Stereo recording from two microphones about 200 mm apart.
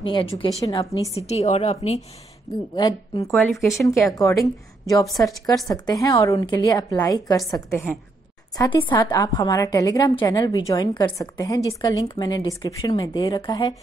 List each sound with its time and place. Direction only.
0.0 s a woman's voice: 25° left (ahead or behind)
2.7 s a woman's voice: 20° left (ahead or behind)
8.5 s a woman's voice: 25° left (ahead or behind)